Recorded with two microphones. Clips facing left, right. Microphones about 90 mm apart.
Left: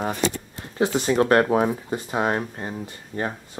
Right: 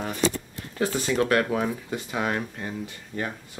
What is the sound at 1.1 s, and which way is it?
Speech, 35° left (ahead or behind).